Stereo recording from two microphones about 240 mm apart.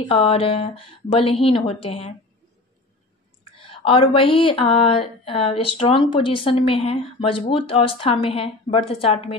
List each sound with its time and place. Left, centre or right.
0.0 s speech: left
3.5 s speech: left